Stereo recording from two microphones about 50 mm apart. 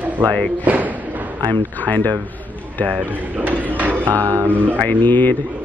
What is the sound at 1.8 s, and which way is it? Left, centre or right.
Speech, left.